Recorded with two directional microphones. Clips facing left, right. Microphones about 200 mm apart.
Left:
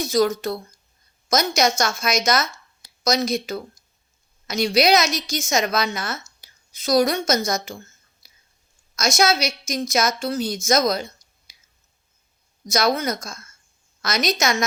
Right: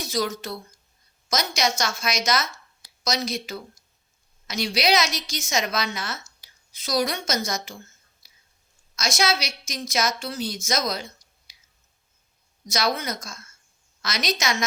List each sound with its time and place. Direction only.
0.0 s a woman's voice: 45° left (ahead or behind)
9.0 s a woman's voice: 45° left (ahead or behind)
11.5 s a sound: 45° left (ahead or behind)
12.6 s a woman's voice: 45° left (ahead or behind)